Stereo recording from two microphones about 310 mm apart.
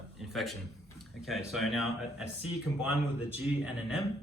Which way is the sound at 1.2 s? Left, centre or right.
Centre.